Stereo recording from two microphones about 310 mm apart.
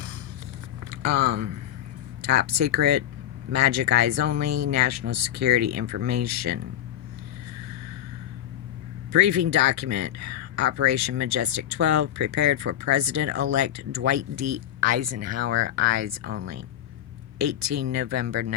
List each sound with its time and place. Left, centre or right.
0.9 s a sound: right
2.5 s speech: right
9.1 s speech: right